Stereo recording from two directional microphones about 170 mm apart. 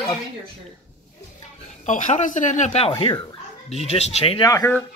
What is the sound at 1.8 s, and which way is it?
Speech, 45° left (ahead or behind).